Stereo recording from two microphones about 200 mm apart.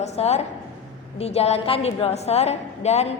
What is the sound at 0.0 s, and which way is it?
A woman's voice, 35° left (ahead or behind).